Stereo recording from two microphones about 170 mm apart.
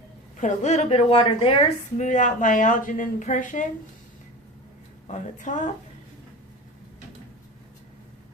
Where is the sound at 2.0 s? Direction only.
45° left (ahead or behind).